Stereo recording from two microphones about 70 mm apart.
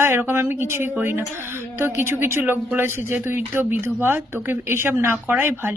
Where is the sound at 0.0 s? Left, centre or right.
Right.